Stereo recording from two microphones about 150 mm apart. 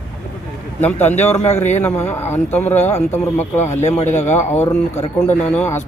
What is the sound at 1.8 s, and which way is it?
Speech, 15° left (ahead or behind).